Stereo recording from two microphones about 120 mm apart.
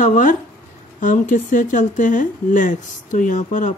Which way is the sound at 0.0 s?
90° left.